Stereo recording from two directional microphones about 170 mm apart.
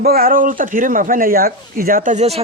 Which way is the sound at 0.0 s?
60° right (ahead or behind).